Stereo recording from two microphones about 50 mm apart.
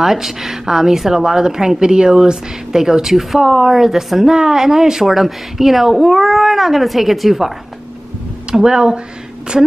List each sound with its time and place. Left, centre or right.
0.0 s a woman's voice: centre